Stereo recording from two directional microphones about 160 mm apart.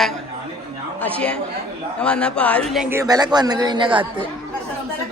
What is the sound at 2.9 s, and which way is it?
Speech, 20° right (ahead or behind).